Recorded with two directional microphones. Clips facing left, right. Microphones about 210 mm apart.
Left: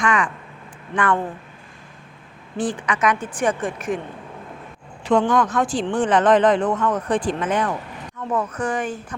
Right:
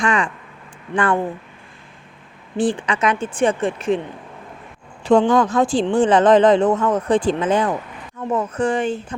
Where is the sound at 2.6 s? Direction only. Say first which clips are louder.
Right 4 dB; 30° right (ahead or behind).